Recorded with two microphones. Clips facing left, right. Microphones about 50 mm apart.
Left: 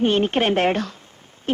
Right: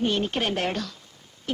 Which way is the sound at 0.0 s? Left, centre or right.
Left.